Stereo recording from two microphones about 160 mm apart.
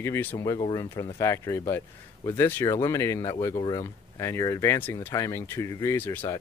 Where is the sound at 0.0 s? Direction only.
15° left (ahead or behind).